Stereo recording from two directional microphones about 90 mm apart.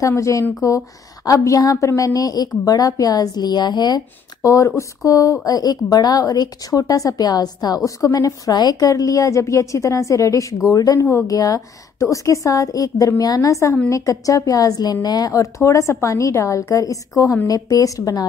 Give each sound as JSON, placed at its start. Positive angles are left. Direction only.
{"t": 0.0, "sound": "speech", "side_deg": 35}
{"t": 4.4, "sound": "speech", "side_deg": 35}